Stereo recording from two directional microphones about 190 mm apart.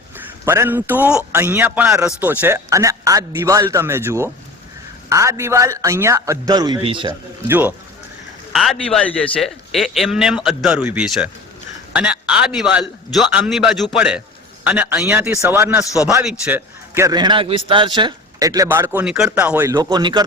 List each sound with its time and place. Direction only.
0.2 s a man's voice: 10° right (ahead or behind)
7.4 s a man's voice: 10° right (ahead or behind)
8.5 s a man's voice: centre (ahead or behind); by 20.2 s 20° right (ahead or behind)